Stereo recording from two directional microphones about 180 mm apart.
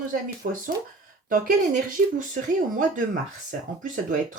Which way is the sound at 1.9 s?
45° right (ahead or behind).